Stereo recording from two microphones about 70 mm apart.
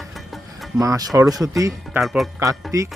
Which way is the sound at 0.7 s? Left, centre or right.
Right.